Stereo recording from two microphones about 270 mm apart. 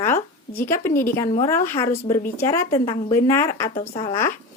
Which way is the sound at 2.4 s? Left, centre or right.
Centre.